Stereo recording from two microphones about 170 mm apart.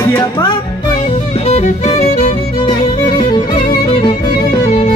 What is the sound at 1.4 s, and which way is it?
Music, 40° left (ahead or behind).